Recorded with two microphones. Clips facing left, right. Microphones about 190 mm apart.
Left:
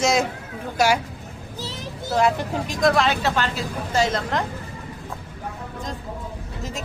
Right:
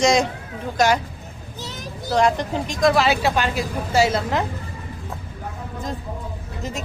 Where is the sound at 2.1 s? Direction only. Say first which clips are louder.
Right 2 dB; 5° left (ahead or behind).